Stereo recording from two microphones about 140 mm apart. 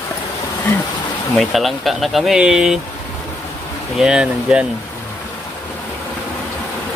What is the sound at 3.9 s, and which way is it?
Speech, 5° right (ahead or behind).